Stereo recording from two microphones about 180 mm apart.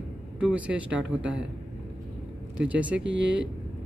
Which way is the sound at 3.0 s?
90° right.